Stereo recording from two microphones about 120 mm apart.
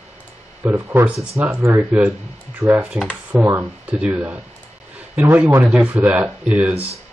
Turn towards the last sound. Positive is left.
turn(degrees=-10)  # may be behind; listen again after turning